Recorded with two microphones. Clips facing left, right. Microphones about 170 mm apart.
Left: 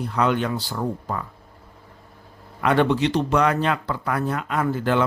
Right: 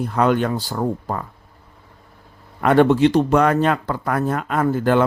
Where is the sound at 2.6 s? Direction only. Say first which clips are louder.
Right 6 dB; 45° right (ahead or behind).